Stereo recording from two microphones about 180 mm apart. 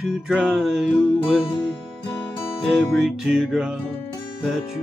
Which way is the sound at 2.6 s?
Centre (ahead or behind).